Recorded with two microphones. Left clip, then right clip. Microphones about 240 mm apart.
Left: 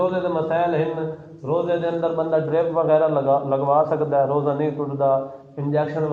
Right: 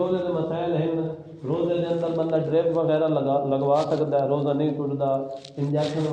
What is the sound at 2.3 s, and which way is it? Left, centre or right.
A man's voice, left.